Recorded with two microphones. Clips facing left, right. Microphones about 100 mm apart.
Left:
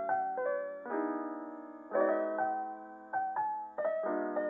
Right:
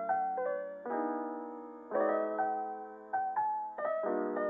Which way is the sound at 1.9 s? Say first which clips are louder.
Left 1 dB; 30° left (ahead or behind).